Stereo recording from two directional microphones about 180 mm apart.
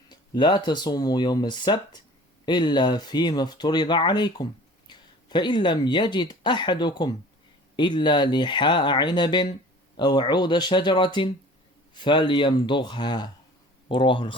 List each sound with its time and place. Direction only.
0.1 s speech: 25° left (ahead or behind)